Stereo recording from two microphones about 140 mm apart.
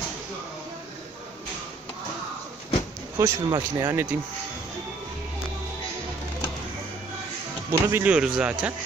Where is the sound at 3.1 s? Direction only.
20° right (ahead or behind).